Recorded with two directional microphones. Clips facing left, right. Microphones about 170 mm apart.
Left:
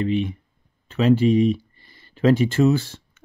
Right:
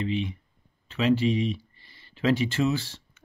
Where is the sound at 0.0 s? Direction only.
50° left (ahead or behind).